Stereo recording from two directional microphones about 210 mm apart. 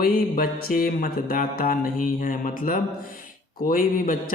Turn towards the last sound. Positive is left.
turn(degrees=40)  # may be behind; listen again after turning